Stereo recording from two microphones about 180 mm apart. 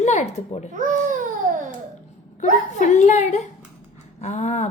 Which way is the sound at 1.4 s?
50° right (ahead or behind).